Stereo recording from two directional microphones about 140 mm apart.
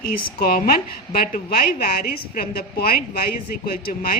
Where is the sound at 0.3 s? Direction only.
90° left.